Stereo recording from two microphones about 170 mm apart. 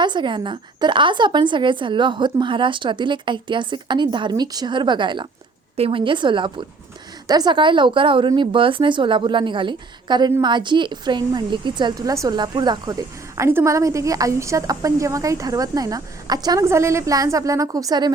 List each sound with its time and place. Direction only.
0.0 s a woman's voice: 25° right (ahead or behind)